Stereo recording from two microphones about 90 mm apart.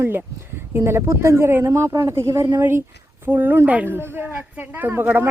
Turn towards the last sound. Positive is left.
turn(degrees=-20)  # may be behind; listen again after turning